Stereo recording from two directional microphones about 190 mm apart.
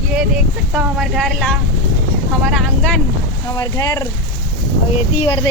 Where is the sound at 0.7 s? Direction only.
Centre (ahead or behind).